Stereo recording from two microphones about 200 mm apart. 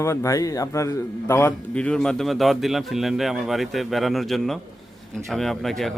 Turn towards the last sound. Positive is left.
turn(degrees=0)  # may be behind; listen again after turning